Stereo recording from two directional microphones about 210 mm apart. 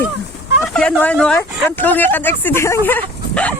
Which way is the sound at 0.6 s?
Centre (ahead or behind).